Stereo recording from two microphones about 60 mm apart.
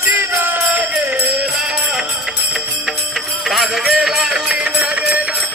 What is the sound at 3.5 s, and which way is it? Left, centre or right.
Music, centre.